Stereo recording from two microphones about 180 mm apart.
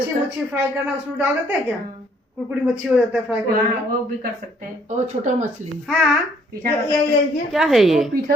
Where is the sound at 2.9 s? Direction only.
5° right (ahead or behind).